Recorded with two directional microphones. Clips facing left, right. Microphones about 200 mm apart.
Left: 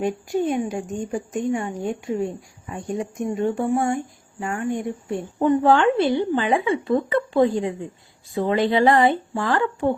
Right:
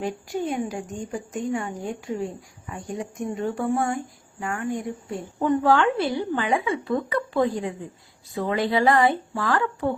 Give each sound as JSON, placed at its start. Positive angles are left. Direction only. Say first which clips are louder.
{"t": 0.0, "sound": "a woman's voice", "louder": "left 5 dB", "side_deg": 20}